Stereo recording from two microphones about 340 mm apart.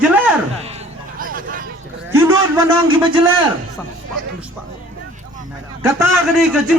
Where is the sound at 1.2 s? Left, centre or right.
Right.